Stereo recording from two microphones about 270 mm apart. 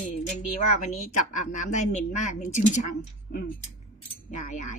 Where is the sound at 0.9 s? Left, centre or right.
Left.